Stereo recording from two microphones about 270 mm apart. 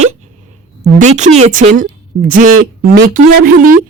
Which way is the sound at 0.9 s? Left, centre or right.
Right.